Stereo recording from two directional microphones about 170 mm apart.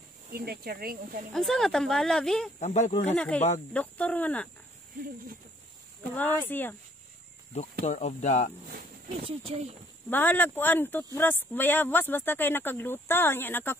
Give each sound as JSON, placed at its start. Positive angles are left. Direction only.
{"t": 0.3, "sound": "speech", "side_deg": -60}
{"t": 1.3, "sound": "speech", "side_deg": 0}
{"t": 2.6, "sound": "speech", "side_deg": 45}
{"t": 3.1, "sound": "speech", "side_deg": 10}
{"t": 3.3, "sound": "speech", "side_deg": 40}
{"t": 3.7, "sound": "speech", "side_deg": 10}
{"t": 6.1, "sound": "speech", "side_deg": 10}
{"t": 7.8, "sound": "speech", "side_deg": 40}
{"t": 9.2, "sound": "speech", "side_deg": -35}
{"t": 10.0, "sound": "speech", "side_deg": 10}